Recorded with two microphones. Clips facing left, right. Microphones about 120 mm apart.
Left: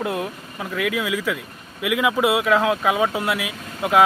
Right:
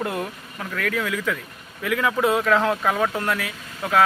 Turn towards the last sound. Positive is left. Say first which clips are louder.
# left 3 dB
turn(degrees=15)  # may be behind; listen again after turning